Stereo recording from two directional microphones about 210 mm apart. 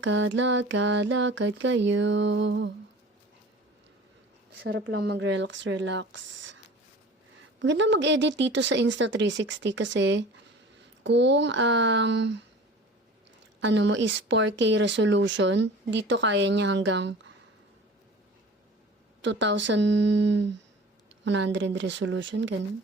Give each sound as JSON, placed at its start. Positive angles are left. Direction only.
{"t": 0.0, "sound": "speech", "side_deg": -65}
{"t": 4.6, "sound": "speech", "side_deg": -55}
{"t": 7.6, "sound": "speech", "side_deg": -60}
{"t": 13.6, "sound": "speech", "side_deg": -60}
{"t": 19.2, "sound": "speech", "side_deg": -60}